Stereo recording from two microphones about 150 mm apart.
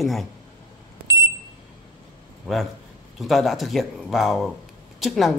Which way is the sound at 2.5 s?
5° left (ahead or behind).